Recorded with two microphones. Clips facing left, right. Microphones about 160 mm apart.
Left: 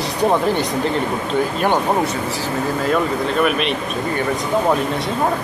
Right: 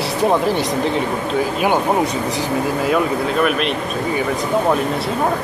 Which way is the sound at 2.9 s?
Centre (ahead or behind).